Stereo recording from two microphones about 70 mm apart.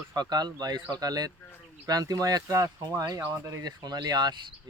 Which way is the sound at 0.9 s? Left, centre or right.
Right.